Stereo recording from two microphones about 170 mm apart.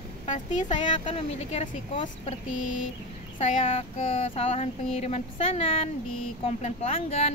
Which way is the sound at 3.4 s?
35° left (ahead or behind).